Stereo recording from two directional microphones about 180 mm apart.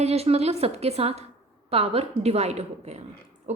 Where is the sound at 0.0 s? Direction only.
35° right (ahead or behind).